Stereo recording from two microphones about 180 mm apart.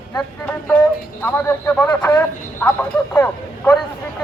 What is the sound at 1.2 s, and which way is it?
A man's voice, 10° left (ahead or behind).